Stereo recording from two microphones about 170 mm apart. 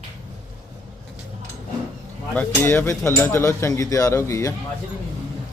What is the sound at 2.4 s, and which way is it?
Speech, 10° left (ahead or behind).